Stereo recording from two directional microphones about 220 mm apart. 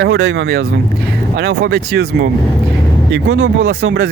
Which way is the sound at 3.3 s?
55° right (ahead or behind).